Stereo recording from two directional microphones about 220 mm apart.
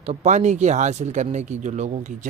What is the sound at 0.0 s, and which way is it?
Speech, 30° right (ahead or behind).